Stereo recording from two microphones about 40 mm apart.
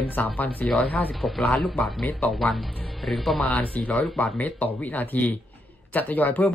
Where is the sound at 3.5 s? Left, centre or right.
Left.